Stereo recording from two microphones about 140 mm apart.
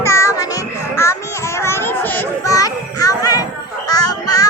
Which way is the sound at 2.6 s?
25° left (ahead or behind).